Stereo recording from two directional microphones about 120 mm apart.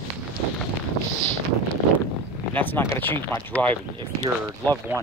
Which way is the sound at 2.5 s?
15° left (ahead or behind).